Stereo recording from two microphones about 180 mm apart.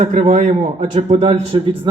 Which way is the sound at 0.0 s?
40° right (ahead or behind).